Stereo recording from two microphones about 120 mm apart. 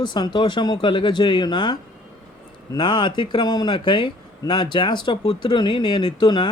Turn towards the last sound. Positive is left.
turn(degrees=40)  # may be behind; listen again after turning